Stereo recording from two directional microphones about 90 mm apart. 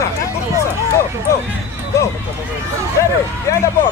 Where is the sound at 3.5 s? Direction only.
35° left (ahead or behind).